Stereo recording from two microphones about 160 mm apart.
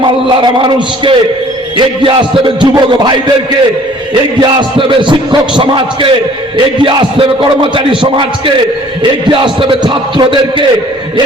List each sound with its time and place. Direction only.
0.0 s a man's voice: 30° right (ahead or behind)